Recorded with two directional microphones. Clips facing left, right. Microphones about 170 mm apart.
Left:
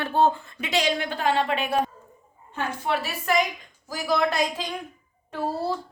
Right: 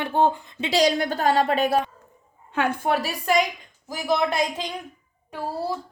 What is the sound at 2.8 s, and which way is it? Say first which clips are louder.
Speech: right 3 dB; 40° right (ahead or behind).